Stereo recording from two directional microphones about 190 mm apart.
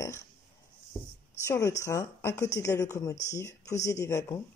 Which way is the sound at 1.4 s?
15° left (ahead or behind).